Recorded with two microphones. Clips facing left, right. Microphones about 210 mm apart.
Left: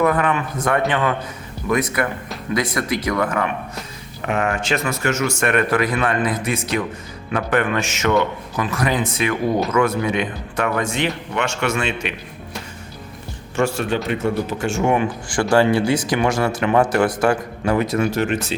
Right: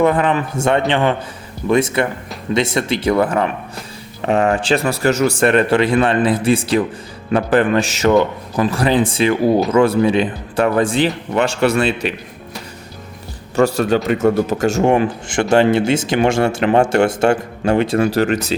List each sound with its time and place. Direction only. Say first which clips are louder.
0.0 s speech: right 3 dB; 30° right (ahead or behind)
13.6 s speech: right 6 dB; 40° right (ahead or behind)
15.3 s speech: right 2 dB; 25° right (ahead or behind)